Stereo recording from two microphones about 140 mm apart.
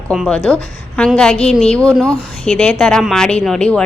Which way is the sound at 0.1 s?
5° left (ahead or behind).